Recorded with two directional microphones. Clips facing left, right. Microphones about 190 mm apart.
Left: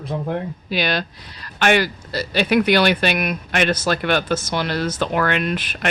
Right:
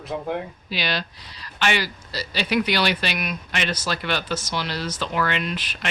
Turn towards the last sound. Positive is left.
turn(degrees=50)  # may be behind; listen again after turning